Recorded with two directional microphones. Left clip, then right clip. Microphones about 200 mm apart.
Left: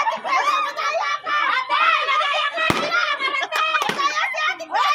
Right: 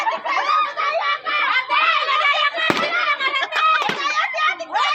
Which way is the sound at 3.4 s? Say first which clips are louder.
Right 5 dB; 5° left (ahead or behind).